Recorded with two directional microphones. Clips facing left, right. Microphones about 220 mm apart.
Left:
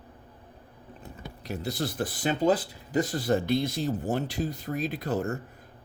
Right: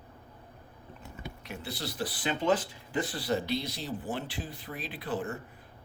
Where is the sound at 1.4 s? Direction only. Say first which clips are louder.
Left 8 dB; 40° left (ahead or behind).